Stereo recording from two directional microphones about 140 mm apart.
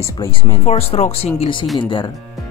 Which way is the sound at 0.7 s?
45° left (ahead or behind).